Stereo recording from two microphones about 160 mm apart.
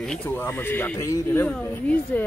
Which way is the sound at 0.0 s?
5° left (ahead or behind).